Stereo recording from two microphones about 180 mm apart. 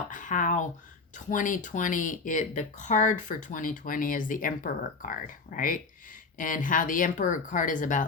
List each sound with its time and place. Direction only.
0.1 s speech: 45° left (ahead or behind)